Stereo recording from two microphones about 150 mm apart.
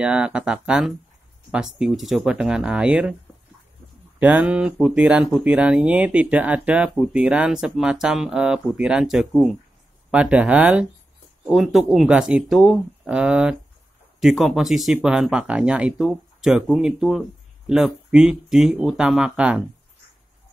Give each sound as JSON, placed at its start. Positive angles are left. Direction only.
{"t": 0.0, "sound": "speech", "side_deg": -10}
{"t": 4.2, "sound": "speech", "side_deg": -10}